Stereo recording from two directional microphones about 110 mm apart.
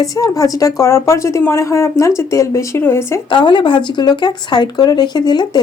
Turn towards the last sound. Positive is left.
turn(degrees=40)  # may be behind; listen again after turning